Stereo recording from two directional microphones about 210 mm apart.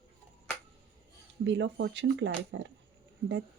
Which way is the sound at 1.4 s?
60° right (ahead or behind).